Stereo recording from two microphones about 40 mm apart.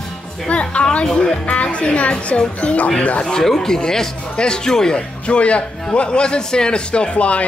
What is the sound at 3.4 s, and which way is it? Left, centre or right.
Speech, centre.